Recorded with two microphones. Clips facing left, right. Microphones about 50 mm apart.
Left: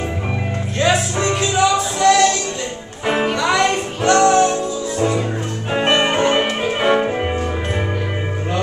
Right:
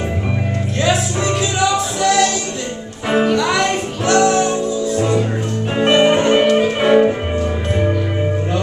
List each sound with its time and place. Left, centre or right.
0.7 s music: centre
3.1 s music: centre
3.3 s music: centre